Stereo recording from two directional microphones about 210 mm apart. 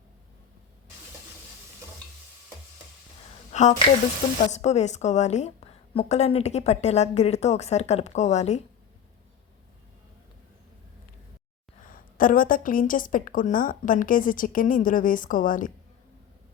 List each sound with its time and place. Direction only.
3.5 s a woman's voice: 35° left (ahead or behind)
11.9 s a woman's voice: 40° left (ahead or behind)